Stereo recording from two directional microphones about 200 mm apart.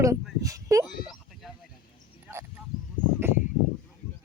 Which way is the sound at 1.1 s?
Centre (ahead or behind).